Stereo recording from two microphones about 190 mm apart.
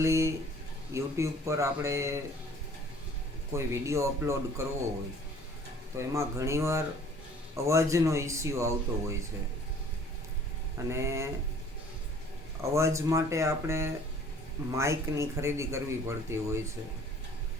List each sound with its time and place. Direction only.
0.0 s speech: 15° right (ahead or behind)
3.5 s speech: 15° right (ahead or behind)
6.0 s speech: 15° right (ahead or behind)
10.8 s speech: 15° right (ahead or behind)
12.7 s speech: 15° right (ahead or behind)